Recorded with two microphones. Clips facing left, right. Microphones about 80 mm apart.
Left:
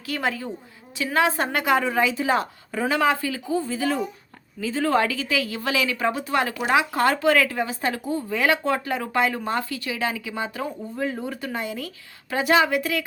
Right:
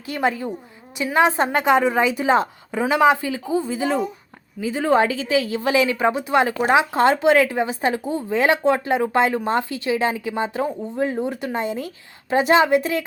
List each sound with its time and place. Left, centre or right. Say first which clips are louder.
0.0 s speech: right 4 dB; right